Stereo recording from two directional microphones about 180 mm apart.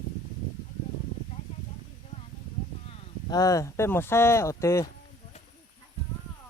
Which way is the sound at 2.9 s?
20° left (ahead or behind).